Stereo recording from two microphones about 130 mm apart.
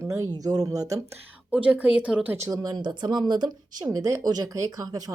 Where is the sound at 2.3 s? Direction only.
20° right (ahead or behind).